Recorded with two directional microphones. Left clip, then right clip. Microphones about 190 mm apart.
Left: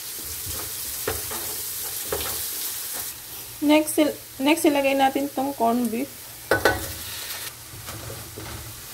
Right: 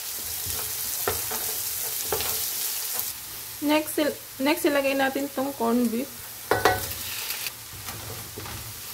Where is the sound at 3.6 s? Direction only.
5° right (ahead or behind).